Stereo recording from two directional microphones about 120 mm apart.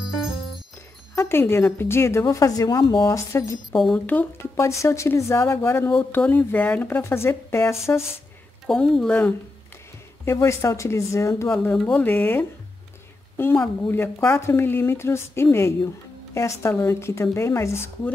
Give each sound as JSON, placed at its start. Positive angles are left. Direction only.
{"t": 1.1, "sound": "speech", "side_deg": 20}
{"t": 3.1, "sound": "speech", "side_deg": 25}
{"t": 3.7, "sound": "speech", "side_deg": 0}
{"t": 4.0, "sound": "speech", "side_deg": 15}
{"t": 8.6, "sound": "speech", "side_deg": 5}
{"t": 10.2, "sound": "speech", "side_deg": 25}
{"t": 11.5, "sound": "speech", "side_deg": 10}
{"t": 13.6, "sound": "speech", "side_deg": 20}